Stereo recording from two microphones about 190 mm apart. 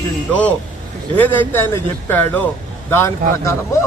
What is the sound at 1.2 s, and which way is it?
A man's voice, 10° left (ahead or behind).